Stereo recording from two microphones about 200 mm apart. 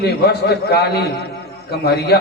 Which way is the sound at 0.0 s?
55° left (ahead or behind).